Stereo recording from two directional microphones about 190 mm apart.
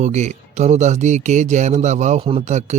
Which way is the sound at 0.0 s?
35° right (ahead or behind).